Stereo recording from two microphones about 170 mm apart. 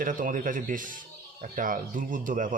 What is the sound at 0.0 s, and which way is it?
Speech, 55° right (ahead or behind).